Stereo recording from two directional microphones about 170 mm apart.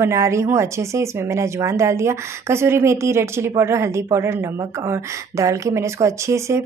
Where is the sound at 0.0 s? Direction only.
15° right (ahead or behind).